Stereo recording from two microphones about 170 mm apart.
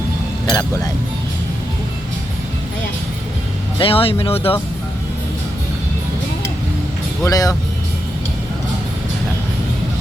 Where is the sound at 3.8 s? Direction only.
35° left (ahead or behind).